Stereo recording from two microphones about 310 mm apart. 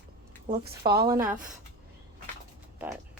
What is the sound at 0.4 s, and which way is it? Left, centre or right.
Speech, right.